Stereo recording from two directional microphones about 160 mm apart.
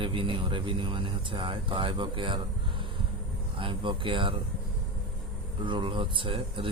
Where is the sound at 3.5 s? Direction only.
30° right (ahead or behind).